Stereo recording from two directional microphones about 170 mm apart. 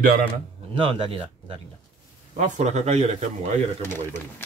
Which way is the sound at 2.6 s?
40° right (ahead or behind).